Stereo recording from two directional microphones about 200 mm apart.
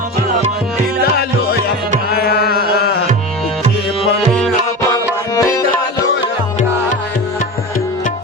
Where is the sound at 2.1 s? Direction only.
50° left (ahead or behind).